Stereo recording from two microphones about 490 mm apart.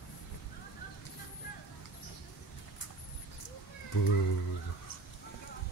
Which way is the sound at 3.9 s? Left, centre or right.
Left.